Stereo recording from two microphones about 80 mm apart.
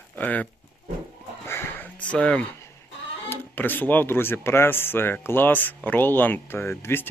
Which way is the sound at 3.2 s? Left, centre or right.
Left.